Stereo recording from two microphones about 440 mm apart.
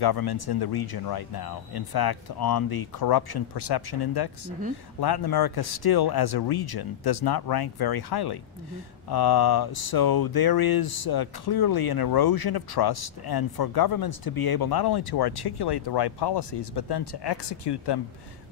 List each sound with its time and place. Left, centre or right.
0.0 s speech: left